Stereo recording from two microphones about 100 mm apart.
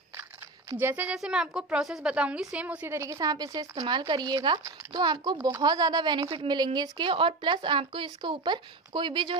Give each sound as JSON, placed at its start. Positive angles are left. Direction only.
{"t": 0.7, "sound": "speech", "side_deg": -20}
{"t": 1.1, "sound": "a woman's voice", "side_deg": -5}
{"t": 2.9, "sound": "a woman's voice", "side_deg": -30}